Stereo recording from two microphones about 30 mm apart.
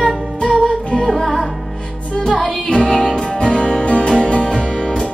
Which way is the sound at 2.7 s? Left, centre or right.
Left.